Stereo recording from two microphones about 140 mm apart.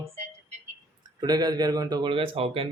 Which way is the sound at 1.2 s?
30° right (ahead or behind).